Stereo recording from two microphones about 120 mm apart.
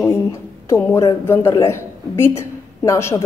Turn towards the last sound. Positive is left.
turn(degrees=25)  # may be behind; listen again after turning